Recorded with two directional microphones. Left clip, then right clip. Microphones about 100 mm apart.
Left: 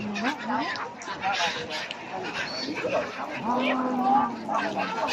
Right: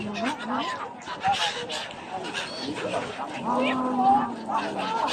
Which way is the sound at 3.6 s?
5° right (ahead or behind).